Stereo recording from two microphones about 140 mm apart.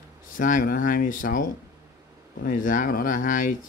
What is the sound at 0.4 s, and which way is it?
Speech, 70° left (ahead or behind).